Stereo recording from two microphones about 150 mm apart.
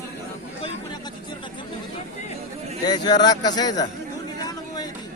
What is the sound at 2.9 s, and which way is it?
Speech, 25° left (ahead or behind).